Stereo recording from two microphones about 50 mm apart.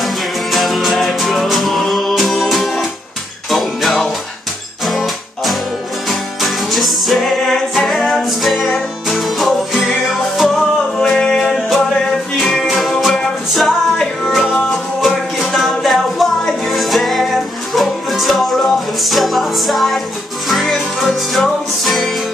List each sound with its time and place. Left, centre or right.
0.0 s music: centre
11.0 s music: centre
12.6 s music: centre
14.2 s music: centre